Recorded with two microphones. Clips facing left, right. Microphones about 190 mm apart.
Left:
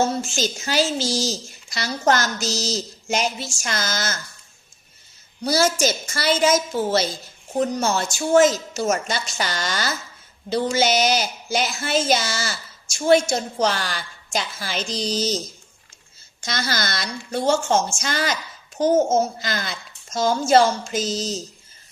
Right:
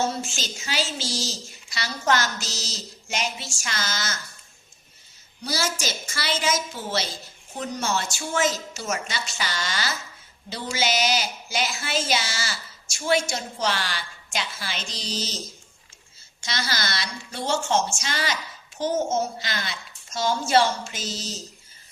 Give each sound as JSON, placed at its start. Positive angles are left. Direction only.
{"t": 0.3, "sound": "speech", "side_deg": 45}
{"t": 5.4, "sound": "speech", "side_deg": 45}
{"t": 16.4, "sound": "speech", "side_deg": 50}